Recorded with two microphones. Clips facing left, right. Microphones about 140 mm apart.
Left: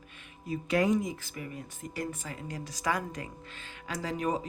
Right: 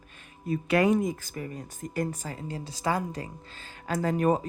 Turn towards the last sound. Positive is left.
turn(degrees=-50)  # may be behind; listen again after turning